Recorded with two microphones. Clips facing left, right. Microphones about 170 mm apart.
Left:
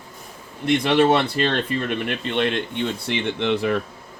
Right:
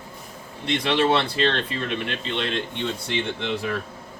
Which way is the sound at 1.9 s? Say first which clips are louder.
Left 3 dB; 55° left (ahead or behind).